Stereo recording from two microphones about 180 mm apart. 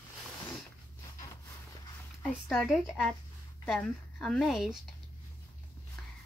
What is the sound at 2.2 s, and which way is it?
Speech, 5° left (ahead or behind).